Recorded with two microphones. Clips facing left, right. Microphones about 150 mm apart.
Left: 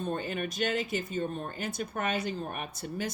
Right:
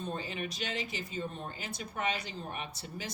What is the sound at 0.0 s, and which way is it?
Speech, 55° left (ahead or behind).